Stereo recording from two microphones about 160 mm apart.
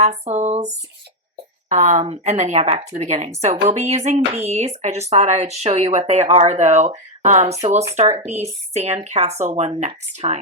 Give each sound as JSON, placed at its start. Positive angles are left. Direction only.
{"t": 0.0, "sound": "speech", "side_deg": -45}